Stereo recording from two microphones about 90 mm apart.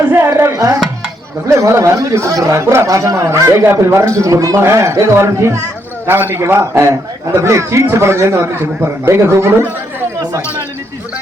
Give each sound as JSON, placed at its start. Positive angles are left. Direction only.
{"t": 0.1, "sound": "a man's voice", "side_deg": -25}